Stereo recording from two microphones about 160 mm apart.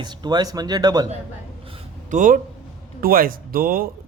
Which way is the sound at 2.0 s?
55° right (ahead or behind).